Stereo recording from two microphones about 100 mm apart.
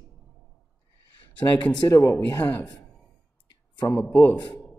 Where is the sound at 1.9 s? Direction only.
30° left (ahead or behind).